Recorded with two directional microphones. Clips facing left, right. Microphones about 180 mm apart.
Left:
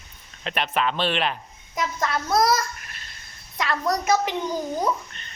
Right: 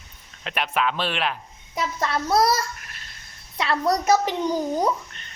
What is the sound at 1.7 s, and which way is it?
Speech, 30° right (ahead or behind).